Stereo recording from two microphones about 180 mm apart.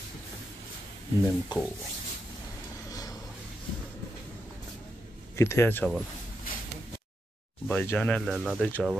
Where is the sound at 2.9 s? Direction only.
20° left (ahead or behind).